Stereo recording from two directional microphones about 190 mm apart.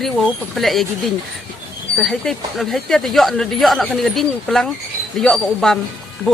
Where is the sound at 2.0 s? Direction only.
Centre (ahead or behind).